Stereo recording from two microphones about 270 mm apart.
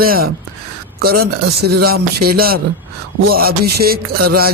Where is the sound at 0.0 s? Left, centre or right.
Right.